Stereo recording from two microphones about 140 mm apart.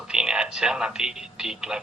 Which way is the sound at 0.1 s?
5° right (ahead or behind).